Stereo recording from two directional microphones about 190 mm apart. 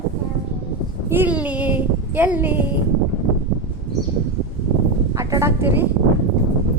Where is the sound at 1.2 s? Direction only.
5° right (ahead or behind).